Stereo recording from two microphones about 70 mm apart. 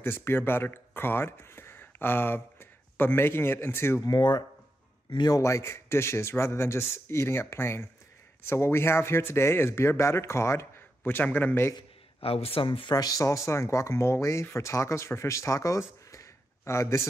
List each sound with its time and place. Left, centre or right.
0.0 s speech: left
4.0 s speech: left
5.4 s a man's voice: left
11.1 s a man's voice: left
12.9 s speech: left